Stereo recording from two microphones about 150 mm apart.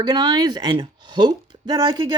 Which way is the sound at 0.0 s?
25° right (ahead or behind).